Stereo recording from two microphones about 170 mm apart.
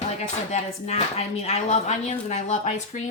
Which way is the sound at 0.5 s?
40° left (ahead or behind).